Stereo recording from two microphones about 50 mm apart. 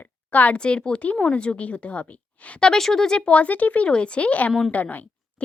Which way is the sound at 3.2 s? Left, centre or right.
Left.